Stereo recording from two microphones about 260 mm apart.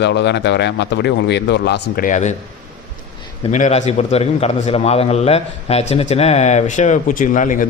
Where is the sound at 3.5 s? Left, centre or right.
Left.